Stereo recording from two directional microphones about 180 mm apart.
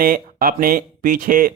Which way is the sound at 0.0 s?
55° right (ahead or behind).